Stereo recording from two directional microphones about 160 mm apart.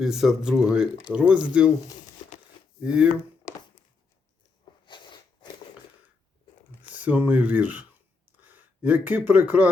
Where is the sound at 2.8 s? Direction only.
5° right (ahead or behind).